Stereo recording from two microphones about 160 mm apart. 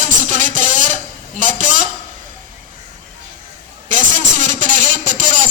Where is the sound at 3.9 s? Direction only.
50° right (ahead or behind).